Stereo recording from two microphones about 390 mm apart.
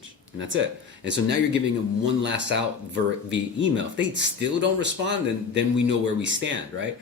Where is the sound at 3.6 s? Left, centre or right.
Right.